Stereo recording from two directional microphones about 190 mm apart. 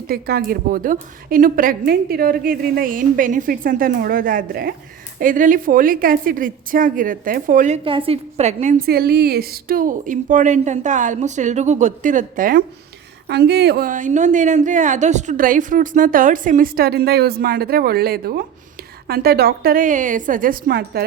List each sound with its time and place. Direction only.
0.1 s a woman's voice: 55° right (ahead or behind)
7.9 s a woman's voice: 30° right (ahead or behind)
8.9 s a woman's voice: 55° right (ahead or behind)
13.2 s a woman's voice: 60° right (ahead or behind)